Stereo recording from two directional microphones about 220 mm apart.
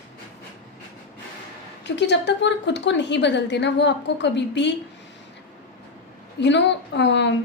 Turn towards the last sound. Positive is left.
turn(degrees=50)  # may be behind; listen again after turning